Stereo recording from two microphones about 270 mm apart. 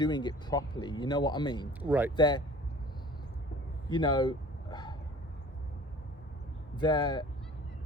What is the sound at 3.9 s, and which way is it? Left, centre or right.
Speech, centre.